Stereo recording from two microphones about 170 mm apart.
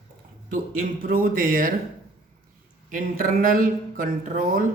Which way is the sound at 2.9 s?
55° right (ahead or behind).